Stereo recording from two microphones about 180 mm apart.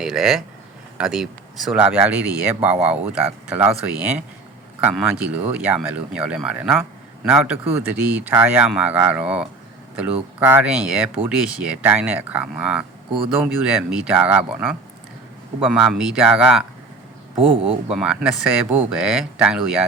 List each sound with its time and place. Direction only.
0.0 s speech: 5° right (ahead or behind)
17.5 s speech: 30° right (ahead or behind)
17.9 s speech: 5° right (ahead or behind)